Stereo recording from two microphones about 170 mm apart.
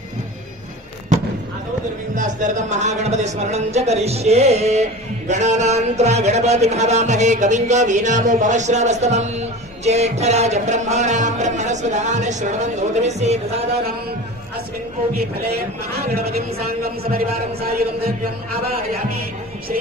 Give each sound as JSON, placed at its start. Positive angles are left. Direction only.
{"t": 2.1, "sound": "a man's voice", "side_deg": -45}
{"t": 5.3, "sound": "a sound", "side_deg": -45}
{"t": 16.3, "sound": "a man's voice", "side_deg": -65}